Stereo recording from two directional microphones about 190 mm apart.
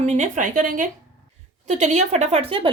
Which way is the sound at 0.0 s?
35° right (ahead or behind).